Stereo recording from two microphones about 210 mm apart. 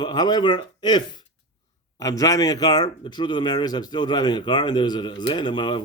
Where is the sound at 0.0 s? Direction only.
20° left (ahead or behind).